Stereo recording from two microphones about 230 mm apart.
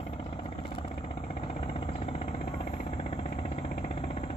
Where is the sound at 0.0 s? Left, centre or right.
Left.